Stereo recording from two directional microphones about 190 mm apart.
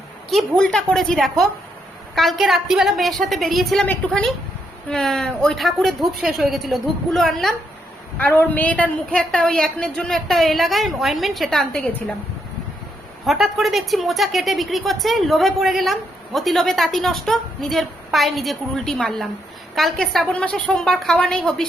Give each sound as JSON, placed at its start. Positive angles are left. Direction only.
{"t": 0.3, "sound": "a woman's voice", "side_deg": 5}
{"t": 13.2, "sound": "a woman's voice", "side_deg": 0}